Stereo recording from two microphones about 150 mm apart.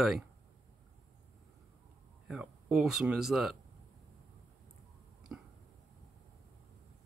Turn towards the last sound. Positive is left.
turn(degrees=-10)  # may be behind; listen again after turning